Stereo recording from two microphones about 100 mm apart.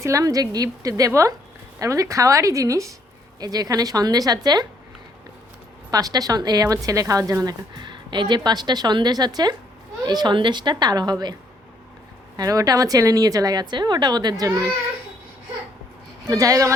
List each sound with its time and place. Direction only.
0.0 s a woman's voice: 35° right (ahead or behind)
5.9 s a woman's voice: 40° right (ahead or behind)
7.7 s a woman's voice: 50° right (ahead or behind)
12.4 s a woman's voice: 35° right (ahead or behind)
16.2 s a woman's voice: 35° right (ahead or behind)